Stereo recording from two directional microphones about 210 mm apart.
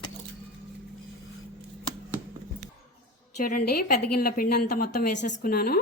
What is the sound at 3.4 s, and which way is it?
A woman's voice, 40° left (ahead or behind).